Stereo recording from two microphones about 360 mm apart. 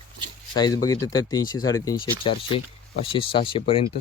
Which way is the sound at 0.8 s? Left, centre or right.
Centre.